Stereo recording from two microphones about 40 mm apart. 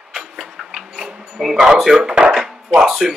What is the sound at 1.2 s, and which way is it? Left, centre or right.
Speech, centre.